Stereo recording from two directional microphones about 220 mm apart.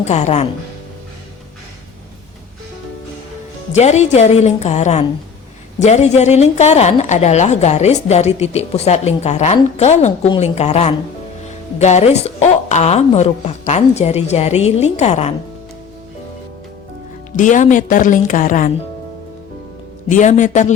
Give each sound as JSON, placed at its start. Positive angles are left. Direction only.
{"t": 0.0, "sound": "a woman's voice", "side_deg": 30}
{"t": 3.7, "sound": "a woman's voice", "side_deg": 30}
{"t": 17.3, "sound": "a woman's voice", "side_deg": 35}
{"t": 20.1, "sound": "a woman's voice", "side_deg": 35}